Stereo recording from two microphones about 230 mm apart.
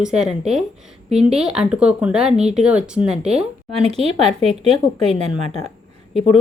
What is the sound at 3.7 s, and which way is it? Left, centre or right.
Speech, right.